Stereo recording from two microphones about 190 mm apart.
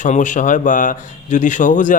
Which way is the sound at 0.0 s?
40° left (ahead or behind).